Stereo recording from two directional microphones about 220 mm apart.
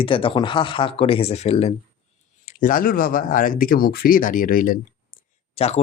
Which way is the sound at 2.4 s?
35° left (ahead or behind).